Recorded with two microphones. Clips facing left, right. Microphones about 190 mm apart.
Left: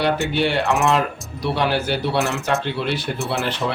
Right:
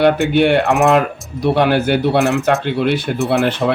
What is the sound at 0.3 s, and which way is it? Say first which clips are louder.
Speech: right 7 dB; 55° right (ahead or behind).